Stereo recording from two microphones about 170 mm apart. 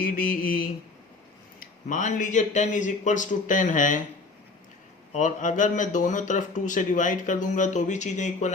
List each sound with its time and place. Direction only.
0.0 s mantra: 55° left (ahead or behind)
1.5 s speech: 50° left (ahead or behind)
5.1 s speech: 50° left (ahead or behind)